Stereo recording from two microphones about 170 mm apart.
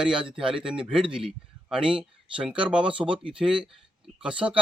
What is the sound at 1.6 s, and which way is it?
Speech, 5° right (ahead or behind).